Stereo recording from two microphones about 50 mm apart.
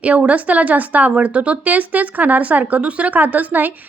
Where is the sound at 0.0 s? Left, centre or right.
Right.